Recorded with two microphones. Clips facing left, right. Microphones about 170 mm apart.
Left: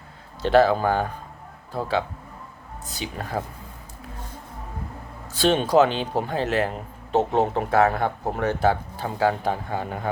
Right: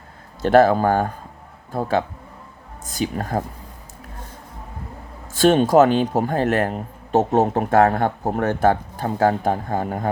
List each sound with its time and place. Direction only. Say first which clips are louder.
0.4 s speech: right 3 dB; 50° right (ahead or behind)
5.3 s speech: right 5 dB; 50° right (ahead or behind)